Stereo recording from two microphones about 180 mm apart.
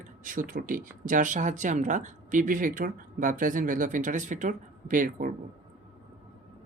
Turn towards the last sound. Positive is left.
turn(degrees=-50)  # may be behind; listen again after turning